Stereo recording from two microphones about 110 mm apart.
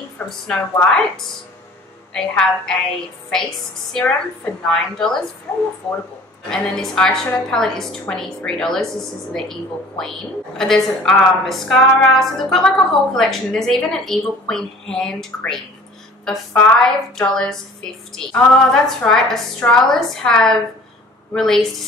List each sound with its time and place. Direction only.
0.5 s a woman's voice: 5° left (ahead or behind)
5.5 s speech: 20° left (ahead or behind)
6.5 s a woman's voice: 5° left (ahead or behind)